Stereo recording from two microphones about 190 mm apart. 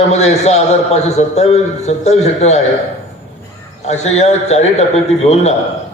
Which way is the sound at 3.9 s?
35° left (ahead or behind).